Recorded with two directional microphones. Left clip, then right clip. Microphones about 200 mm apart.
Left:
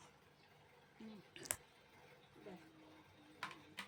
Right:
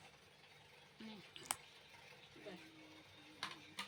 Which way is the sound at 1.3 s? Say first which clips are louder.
Right 2 dB; 20° left (ahead or behind).